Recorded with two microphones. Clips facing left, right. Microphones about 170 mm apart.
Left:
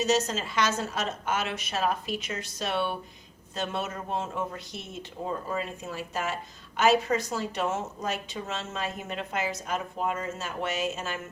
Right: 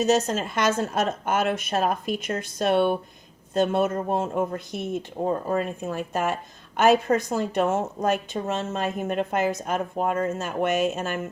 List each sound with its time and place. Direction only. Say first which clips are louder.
0.0 s speech: right 5 dB; 50° right (ahead or behind)